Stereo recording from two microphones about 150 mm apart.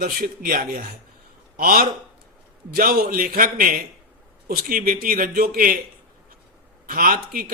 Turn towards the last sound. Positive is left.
turn(degrees=-70)  # may be behind; listen again after turning